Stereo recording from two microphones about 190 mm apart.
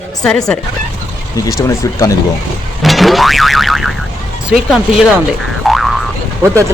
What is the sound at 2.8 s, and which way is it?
A woman's voice, centre (ahead or behind).